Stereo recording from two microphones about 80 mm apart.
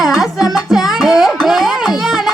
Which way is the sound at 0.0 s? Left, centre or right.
Centre.